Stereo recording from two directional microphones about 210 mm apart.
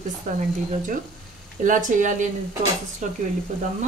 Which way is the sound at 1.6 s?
40° right (ahead or behind).